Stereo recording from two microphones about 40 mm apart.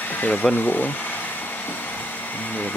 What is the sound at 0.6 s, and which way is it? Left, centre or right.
Speech, left.